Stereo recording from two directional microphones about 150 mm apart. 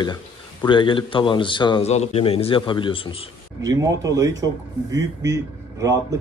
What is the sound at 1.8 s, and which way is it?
A man's voice, 45° left (ahead or behind).